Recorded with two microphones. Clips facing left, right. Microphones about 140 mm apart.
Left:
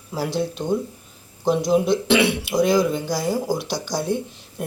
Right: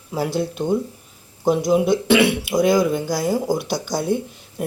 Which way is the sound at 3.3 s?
20° right (ahead or behind).